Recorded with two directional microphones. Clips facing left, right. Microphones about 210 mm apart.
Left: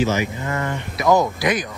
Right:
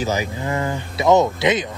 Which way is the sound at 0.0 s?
30° right (ahead or behind).